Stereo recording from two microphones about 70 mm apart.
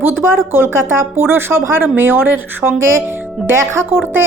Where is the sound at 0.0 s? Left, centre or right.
Right.